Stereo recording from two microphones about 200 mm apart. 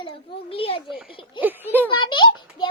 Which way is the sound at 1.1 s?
25° left (ahead or behind).